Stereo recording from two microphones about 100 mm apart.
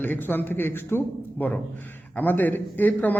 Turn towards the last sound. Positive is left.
turn(degrees=20)  # may be behind; listen again after turning